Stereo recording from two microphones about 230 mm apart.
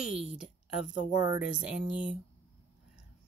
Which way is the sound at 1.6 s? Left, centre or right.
Centre.